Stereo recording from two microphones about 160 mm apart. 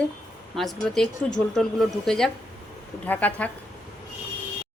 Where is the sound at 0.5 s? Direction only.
Centre (ahead or behind).